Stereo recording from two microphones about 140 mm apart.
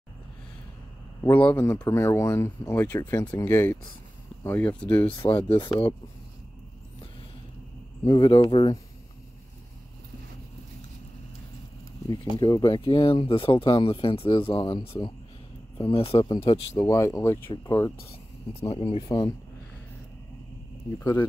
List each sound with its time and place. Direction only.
1.3 s speech: 15° left (ahead or behind)
8.1 s speech: 40° left (ahead or behind)
12.1 s speech: 30° left (ahead or behind)
16.7 s speech: 20° left (ahead or behind)
18.5 s speech: 45° left (ahead or behind)
19.0 s speech: 25° left (ahead or behind)
21.0 s speech: 25° left (ahead or behind)